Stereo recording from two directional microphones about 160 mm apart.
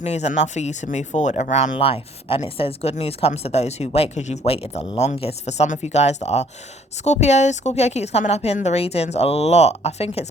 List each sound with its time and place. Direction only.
0.0 s speech: 45° left (ahead or behind)